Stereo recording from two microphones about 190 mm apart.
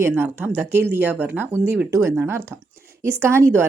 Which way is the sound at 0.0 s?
10° right (ahead or behind).